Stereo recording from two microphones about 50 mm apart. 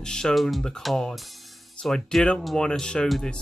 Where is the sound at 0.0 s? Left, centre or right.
Centre.